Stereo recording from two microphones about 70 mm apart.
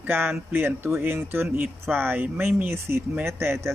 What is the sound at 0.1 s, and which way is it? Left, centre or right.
Speech, right.